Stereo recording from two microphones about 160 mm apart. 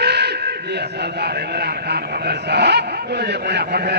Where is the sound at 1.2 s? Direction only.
90° right.